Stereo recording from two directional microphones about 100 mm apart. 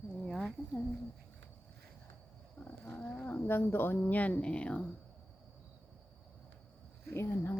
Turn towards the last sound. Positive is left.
turn(degrees=25)  # may be behind; listen again after turning